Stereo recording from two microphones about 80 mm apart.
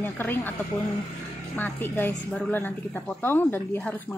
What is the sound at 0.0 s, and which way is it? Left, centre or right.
Speech, left.